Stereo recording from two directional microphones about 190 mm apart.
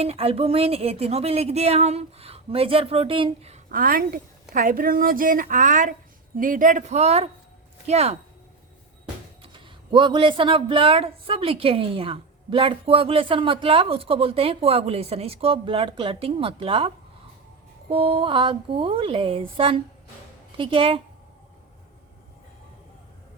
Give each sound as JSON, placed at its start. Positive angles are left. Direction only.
{"t": 0.0, "sound": "speech", "side_deg": -30}
{"t": 3.7, "sound": "a woman's voice", "side_deg": -50}
{"t": 9.4, "sound": "speech", "side_deg": -25}